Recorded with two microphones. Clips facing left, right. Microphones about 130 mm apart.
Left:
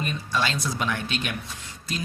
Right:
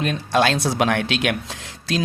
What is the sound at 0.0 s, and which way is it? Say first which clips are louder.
A man's voice: right 8 dB; 80° right.